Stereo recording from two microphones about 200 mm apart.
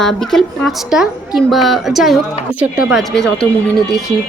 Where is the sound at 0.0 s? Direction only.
Centre (ahead or behind).